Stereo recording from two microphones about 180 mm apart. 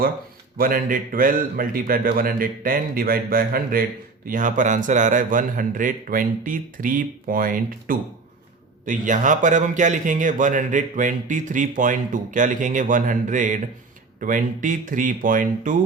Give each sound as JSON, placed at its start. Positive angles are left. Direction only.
{"t": 0.5, "sound": "speech", "side_deg": -50}